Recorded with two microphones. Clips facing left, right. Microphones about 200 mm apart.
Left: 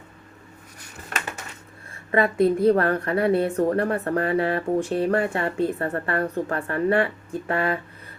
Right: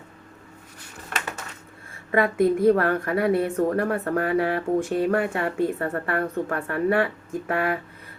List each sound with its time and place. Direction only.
2.1 s speech: 30° left (ahead or behind)